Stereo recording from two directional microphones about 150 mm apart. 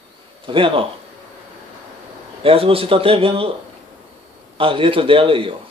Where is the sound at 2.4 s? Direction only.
40° right (ahead or behind).